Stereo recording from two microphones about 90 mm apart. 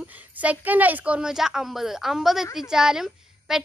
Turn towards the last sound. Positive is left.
turn(degrees=-5)  # may be behind; listen again after turning